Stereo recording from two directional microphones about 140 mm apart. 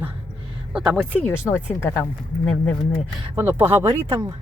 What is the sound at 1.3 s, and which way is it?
Speech, 15° left (ahead or behind).